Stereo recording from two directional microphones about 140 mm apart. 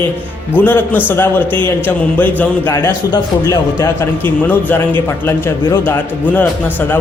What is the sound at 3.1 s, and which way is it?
Speech, 25° left (ahead or behind).